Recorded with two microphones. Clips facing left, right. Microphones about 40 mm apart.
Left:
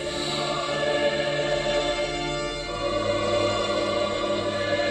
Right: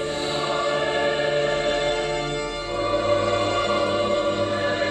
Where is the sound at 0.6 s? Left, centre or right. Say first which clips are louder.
Right 1 dB; right.